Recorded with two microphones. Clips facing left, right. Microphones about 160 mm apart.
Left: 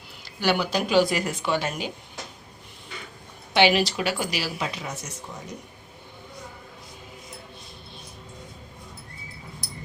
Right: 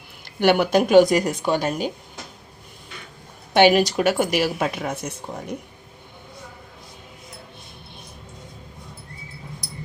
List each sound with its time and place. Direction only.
0.3 s speech: 55° right (ahead or behind)
3.5 s speech: 45° right (ahead or behind)